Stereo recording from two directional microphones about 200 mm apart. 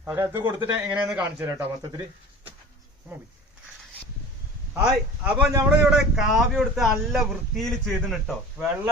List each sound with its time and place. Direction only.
0.0 s speech: 15° right (ahead or behind)
0.9 s speech: 5° right (ahead or behind)
4.7 s speech: 5° right (ahead or behind)